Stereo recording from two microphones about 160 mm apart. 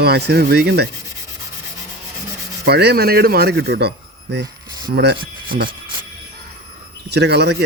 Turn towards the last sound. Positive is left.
turn(degrees=-90)